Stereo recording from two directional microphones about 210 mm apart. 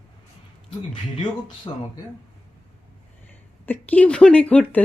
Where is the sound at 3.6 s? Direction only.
10° left (ahead or behind).